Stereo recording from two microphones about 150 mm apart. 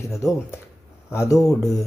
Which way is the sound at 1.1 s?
20° left (ahead or behind).